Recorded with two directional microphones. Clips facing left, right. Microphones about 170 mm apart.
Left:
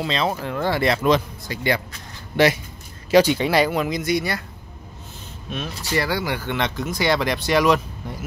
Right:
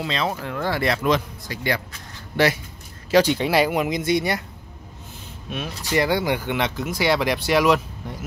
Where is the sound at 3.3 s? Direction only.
5° right (ahead or behind).